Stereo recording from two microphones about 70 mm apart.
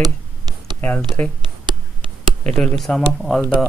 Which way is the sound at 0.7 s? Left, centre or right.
Left.